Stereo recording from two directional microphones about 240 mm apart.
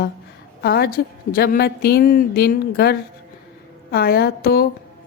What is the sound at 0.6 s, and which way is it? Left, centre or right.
A woman's voice, left.